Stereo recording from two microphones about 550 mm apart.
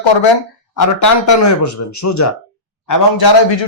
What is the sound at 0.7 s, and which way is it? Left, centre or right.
A man's voice, left.